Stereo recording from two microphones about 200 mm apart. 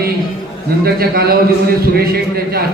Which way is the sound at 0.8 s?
50° right (ahead or behind).